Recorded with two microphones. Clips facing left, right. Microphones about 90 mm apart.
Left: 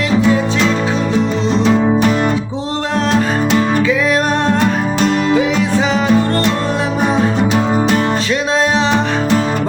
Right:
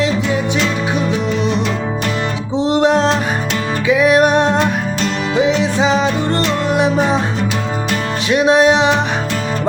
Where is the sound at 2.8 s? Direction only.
20° right (ahead or behind).